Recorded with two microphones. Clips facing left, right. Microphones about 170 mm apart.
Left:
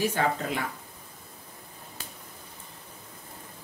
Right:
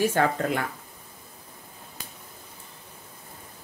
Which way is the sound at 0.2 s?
50° right (ahead or behind).